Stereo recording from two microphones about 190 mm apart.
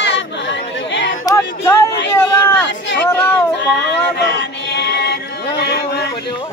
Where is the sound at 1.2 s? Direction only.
15° left (ahead or behind).